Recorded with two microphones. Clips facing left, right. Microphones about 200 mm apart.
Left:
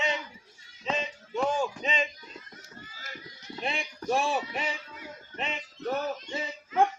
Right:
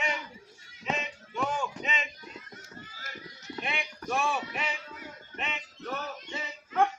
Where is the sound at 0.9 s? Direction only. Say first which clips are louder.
Left 2 dB; 30° left (ahead or behind).